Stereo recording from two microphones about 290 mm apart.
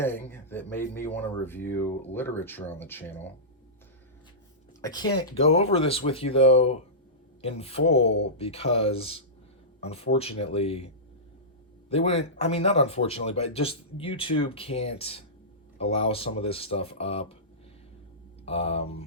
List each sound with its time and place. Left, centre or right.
0.0 s speech: centre
4.8 s speech: centre
18.4 s speech: left